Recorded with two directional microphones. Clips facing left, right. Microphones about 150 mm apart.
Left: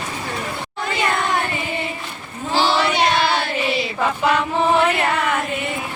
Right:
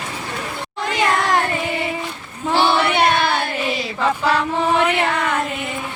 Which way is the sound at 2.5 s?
60° right (ahead or behind).